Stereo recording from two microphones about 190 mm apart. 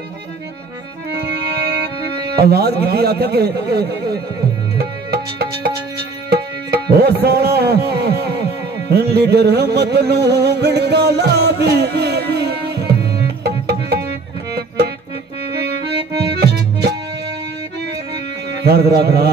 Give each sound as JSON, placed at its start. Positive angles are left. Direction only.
{"t": 1.1, "sound": "music", "side_deg": -60}
{"t": 2.8, "sound": "a man's voice", "side_deg": -55}
{"t": 4.7, "sound": "music", "side_deg": -55}
{"t": 16.1, "sound": "music", "side_deg": -20}
{"t": 16.3, "sound": "accordion", "side_deg": -60}
{"t": 18.6, "sound": "a man's voice", "side_deg": -55}